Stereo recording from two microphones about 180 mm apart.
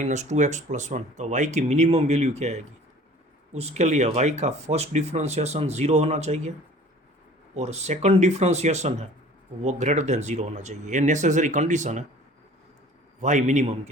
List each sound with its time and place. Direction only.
0.0 s speech: 40° right (ahead or behind)
7.5 s speech: 35° right (ahead or behind)
13.2 s speech: 40° right (ahead or behind)